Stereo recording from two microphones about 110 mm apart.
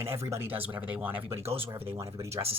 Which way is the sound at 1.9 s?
30° right (ahead or behind).